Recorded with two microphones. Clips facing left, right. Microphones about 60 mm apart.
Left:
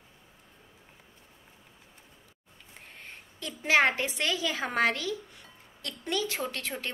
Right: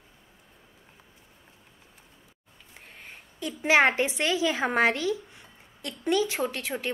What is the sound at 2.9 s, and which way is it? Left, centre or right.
A woman's voice, centre.